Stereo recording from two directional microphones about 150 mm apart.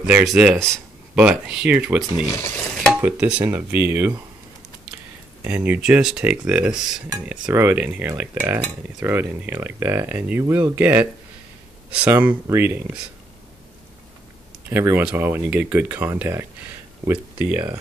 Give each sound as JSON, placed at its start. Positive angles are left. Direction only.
{"t": 0.0, "sound": "speech", "side_deg": -5}
{"t": 5.4, "sound": "speech", "side_deg": -10}
{"t": 14.7, "sound": "speech", "side_deg": -15}